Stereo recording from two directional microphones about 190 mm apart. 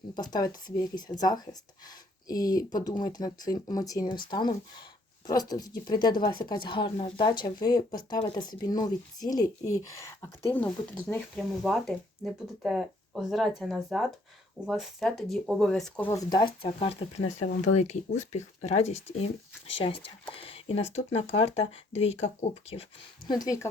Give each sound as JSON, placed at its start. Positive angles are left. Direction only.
{"t": 0.2, "sound": "speech", "side_deg": 20}
{"t": 16.8, "sound": "speech", "side_deg": 30}
{"t": 23.3, "sound": "speech", "side_deg": 20}